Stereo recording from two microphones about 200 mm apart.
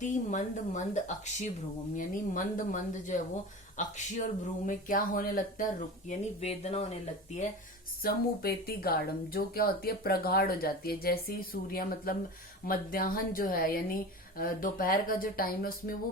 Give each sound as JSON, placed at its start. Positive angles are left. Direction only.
{"t": 0.0, "sound": "speech", "side_deg": 40}
{"t": 8.0, "sound": "speech", "side_deg": 50}